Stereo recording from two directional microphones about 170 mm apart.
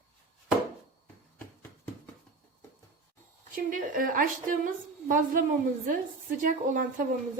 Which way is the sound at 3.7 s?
50° right (ahead or behind).